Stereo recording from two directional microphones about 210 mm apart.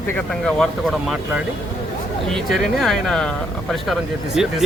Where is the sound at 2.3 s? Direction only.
Centre (ahead or behind).